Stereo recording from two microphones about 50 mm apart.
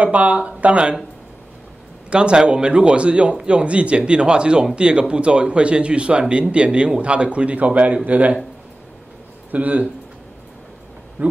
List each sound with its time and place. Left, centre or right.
0.0 s a man's voice: right
2.0 s a man's voice: right
9.5 s speech: right
11.2 s hoot: right